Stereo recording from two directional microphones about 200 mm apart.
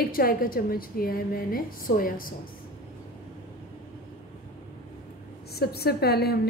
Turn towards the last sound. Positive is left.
turn(degrees=50)  # may be behind; listen again after turning